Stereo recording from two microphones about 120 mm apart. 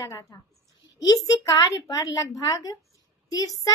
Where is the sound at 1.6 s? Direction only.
30° left (ahead or behind).